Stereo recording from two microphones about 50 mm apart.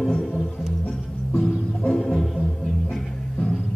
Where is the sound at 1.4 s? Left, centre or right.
Centre.